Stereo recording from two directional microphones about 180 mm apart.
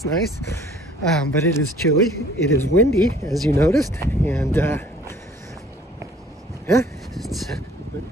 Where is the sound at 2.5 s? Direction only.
15° left (ahead or behind).